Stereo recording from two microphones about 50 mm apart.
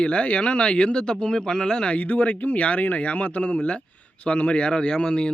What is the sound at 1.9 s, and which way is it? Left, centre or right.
A man's voice, left.